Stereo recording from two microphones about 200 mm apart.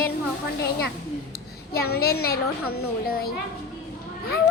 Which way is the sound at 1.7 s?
50° left (ahead or behind).